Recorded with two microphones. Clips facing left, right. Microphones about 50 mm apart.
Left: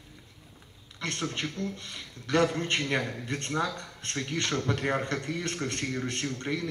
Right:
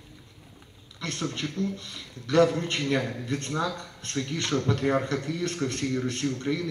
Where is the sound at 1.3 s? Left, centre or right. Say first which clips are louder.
Right 3 dB; left.